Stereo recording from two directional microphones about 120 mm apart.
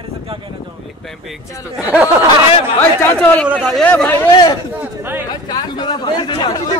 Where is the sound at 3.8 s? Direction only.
10° left (ahead or behind).